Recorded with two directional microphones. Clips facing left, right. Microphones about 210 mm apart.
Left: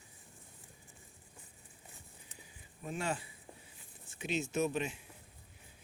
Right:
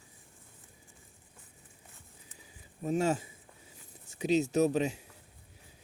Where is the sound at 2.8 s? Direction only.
40° right (ahead or behind).